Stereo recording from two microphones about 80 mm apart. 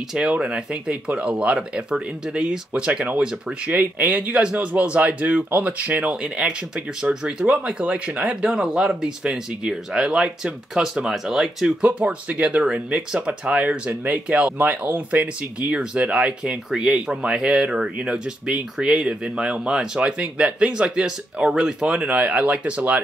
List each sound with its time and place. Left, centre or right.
0.1 s speech: centre